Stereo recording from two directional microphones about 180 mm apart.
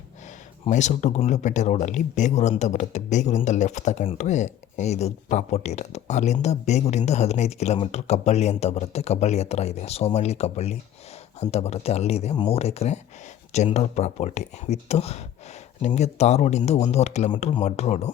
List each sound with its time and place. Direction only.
0.7 s speech: 40° left (ahead or behind)